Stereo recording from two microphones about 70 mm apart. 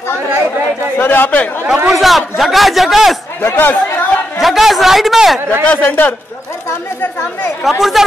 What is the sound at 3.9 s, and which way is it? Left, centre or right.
Chatter, left.